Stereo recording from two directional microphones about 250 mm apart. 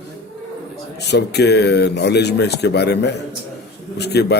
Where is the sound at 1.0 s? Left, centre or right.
Left.